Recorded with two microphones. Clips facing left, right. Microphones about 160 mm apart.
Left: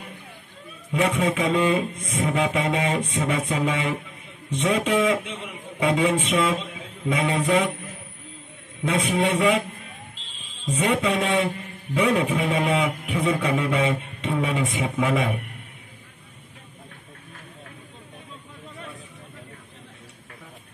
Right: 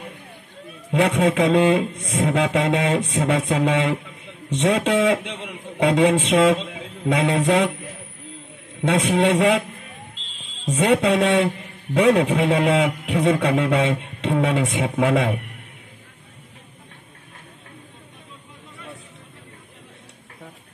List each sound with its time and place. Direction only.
0.9 s a man's voice: 70° right (ahead or behind)
10.6 s a man's voice: 70° right (ahead or behind)